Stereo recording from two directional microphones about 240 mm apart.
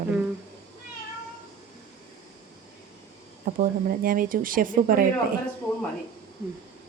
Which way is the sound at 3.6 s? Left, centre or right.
Right.